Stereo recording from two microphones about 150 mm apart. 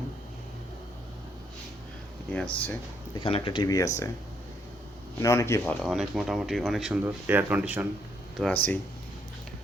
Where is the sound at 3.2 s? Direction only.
35° left (ahead or behind).